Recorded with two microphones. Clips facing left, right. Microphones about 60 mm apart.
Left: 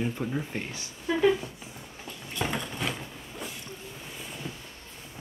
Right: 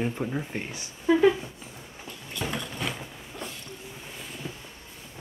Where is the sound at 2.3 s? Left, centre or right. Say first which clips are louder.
Left 1 dB; centre.